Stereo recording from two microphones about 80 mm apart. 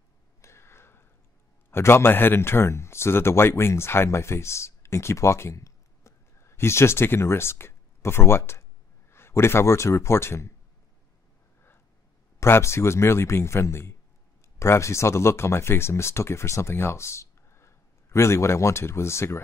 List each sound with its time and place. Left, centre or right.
0.4 s a sound: left
1.7 s speech: left
12.4 s speech: left